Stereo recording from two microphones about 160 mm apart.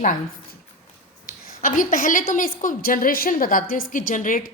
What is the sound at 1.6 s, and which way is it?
A woman's voice, 55° left (ahead or behind).